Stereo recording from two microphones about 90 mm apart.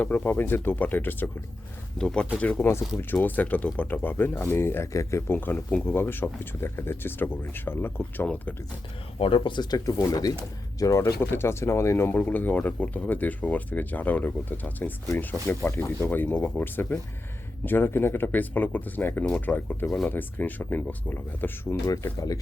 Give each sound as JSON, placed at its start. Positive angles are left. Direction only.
{"t": 0.0, "sound": "speech", "side_deg": 20}
{"t": 2.0, "sound": "speech", "side_deg": 10}
{"t": 5.3, "sound": "speech", "side_deg": 25}
{"t": 9.1, "sound": "speech", "side_deg": 85}
{"t": 21.8, "sound": "speech", "side_deg": 40}